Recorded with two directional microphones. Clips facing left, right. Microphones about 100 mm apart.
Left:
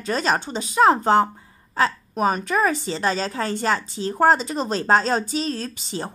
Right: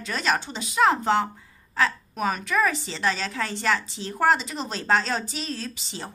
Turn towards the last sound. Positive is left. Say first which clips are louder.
# left 6 dB
turn(degrees=50)  # may be behind; listen again after turning